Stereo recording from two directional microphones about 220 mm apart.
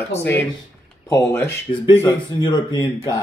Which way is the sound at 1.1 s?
10° left (ahead or behind).